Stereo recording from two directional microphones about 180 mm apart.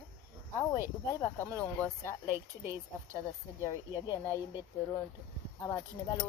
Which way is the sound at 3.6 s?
20° left (ahead or behind).